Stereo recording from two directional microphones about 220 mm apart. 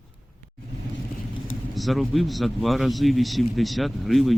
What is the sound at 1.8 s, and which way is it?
Speech, centre (ahead or behind).